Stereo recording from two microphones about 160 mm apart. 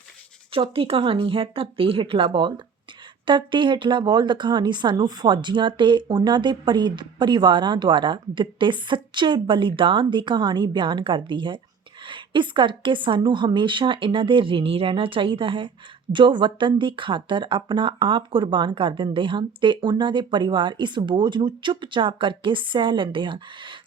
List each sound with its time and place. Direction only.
0.5 s speech: 35° right (ahead or behind)